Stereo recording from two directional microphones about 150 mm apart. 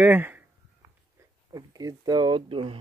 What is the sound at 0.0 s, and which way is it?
Speech, 15° right (ahead or behind).